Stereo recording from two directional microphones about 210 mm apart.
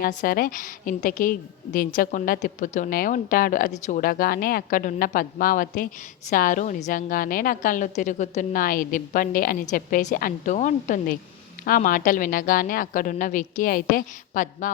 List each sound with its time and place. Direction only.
0.0 s a woman's voice: 40° left (ahead or behind)